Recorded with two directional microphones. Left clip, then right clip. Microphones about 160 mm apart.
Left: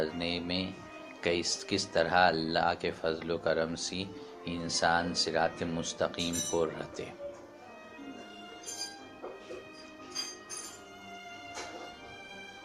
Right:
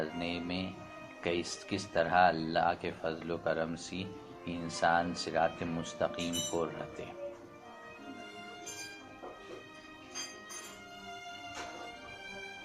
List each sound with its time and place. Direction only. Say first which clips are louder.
0.0 s speech: left 3 dB; 40° left (ahead or behind)